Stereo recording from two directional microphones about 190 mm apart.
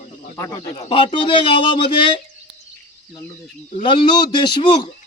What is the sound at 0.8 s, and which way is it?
Speech, 30° left (ahead or behind).